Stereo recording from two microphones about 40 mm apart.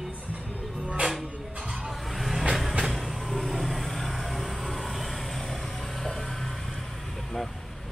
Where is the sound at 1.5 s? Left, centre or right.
Centre.